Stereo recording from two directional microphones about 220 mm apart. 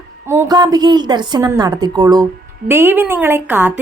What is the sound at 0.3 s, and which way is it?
A woman's voice, 15° right (ahead or behind).